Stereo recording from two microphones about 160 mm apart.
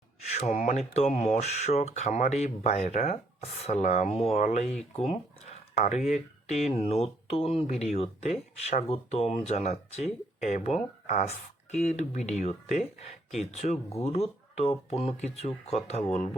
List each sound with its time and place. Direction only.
0.3 s speech: 45° left (ahead or behind)
4.9 s a sound: 40° left (ahead or behind)
6.1 s speech: 45° left (ahead or behind)